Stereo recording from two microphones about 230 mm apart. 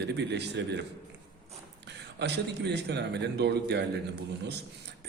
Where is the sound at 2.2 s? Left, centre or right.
Right.